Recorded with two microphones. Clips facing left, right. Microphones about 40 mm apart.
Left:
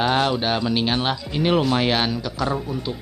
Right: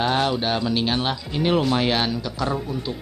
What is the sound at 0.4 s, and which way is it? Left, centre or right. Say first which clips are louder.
Speech: left 1 dB; left.